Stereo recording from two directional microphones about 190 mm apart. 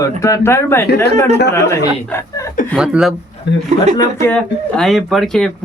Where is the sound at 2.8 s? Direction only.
5° right (ahead or behind).